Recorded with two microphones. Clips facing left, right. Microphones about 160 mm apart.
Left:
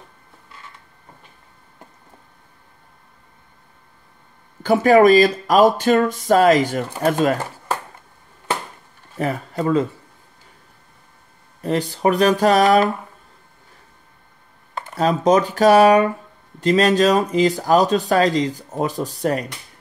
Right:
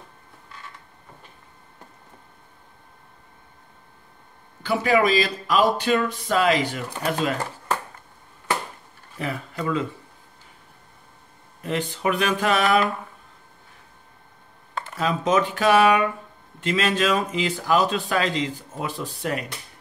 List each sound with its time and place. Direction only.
4.6 s speech: 45° left (ahead or behind)
9.2 s speech: 40° left (ahead or behind)
11.6 s speech: 40° left (ahead or behind)
15.0 s speech: 40° left (ahead or behind)